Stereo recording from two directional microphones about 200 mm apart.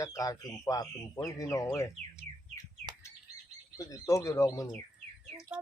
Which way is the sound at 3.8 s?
15° left (ahead or behind).